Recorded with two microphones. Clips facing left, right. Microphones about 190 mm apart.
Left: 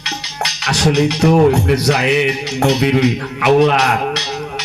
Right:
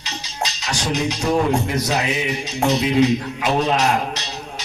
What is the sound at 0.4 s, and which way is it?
Speech, 65° left (ahead or behind).